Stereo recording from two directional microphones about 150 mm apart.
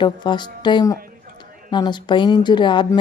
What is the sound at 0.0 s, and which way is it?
A woman's voice, 30° left (ahead or behind).